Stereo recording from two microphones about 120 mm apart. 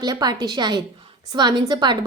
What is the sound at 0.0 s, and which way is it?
A woman's voice, 35° right (ahead or behind).